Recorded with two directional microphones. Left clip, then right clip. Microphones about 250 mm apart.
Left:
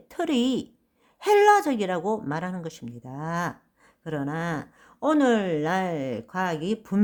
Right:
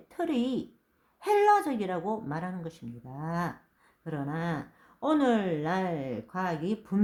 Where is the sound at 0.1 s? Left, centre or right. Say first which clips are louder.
Left 5 dB; left.